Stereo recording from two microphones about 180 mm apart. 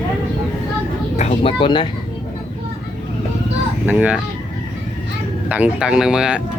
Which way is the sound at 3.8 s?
10° right (ahead or behind).